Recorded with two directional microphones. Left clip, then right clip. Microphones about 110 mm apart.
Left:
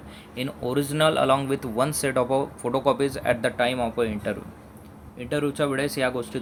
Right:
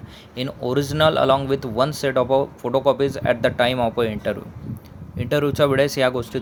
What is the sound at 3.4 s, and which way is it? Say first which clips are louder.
Speech: right 5 dB; 45° right (ahead or behind).